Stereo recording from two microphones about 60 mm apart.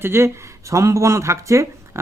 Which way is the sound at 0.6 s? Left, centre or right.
Right.